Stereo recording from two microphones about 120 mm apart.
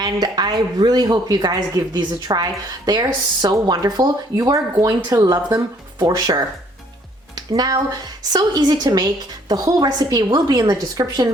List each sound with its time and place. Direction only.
0.0 s speech: 35° right (ahead or behind)